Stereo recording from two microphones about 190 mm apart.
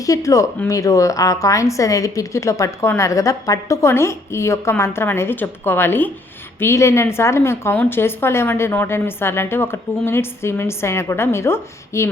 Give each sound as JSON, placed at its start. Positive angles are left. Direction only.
{"t": 0.0, "sound": "a woman's voice", "side_deg": 15}